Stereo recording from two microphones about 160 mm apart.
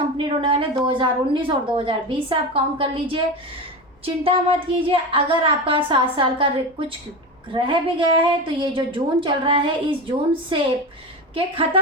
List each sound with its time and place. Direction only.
0.2 s a woman's voice: 35° right (ahead or behind)